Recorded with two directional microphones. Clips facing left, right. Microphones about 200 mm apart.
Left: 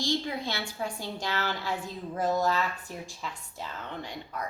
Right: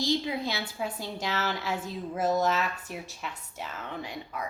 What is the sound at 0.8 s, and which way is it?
A woman's voice, 10° right (ahead or behind).